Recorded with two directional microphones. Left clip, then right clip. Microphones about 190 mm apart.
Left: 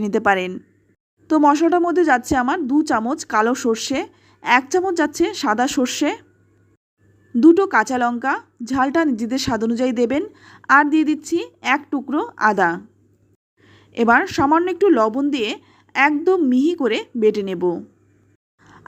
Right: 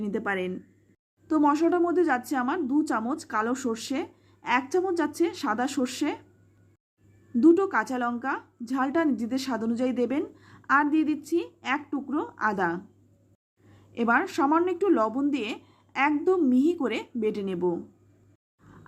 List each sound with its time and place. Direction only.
0.0 s speech: 45° left (ahead or behind)
1.3 s a woman's voice: 30° left (ahead or behind)
7.3 s a woman's voice: 30° left (ahead or behind)